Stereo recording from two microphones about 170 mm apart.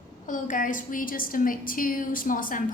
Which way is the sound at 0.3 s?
50° left (ahead or behind).